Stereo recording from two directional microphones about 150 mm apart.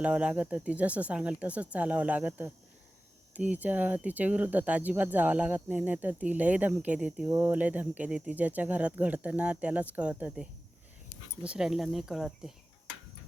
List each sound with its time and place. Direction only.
0.0 s speech: 10° right (ahead or behind)